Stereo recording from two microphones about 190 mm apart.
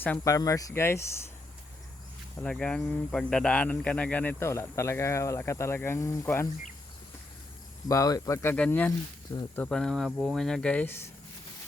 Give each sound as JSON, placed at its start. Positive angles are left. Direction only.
{"t": 0.0, "sound": "speech", "side_deg": 15}
{"t": 2.4, "sound": "speech", "side_deg": 5}
{"t": 7.9, "sound": "speech", "side_deg": 20}